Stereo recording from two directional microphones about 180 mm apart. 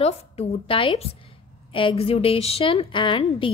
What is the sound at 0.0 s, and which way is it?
A woman's voice, 30° left (ahead or behind).